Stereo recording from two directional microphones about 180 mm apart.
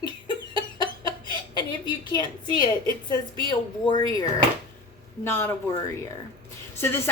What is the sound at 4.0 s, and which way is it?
A woman's voice, 20° left (ahead or behind).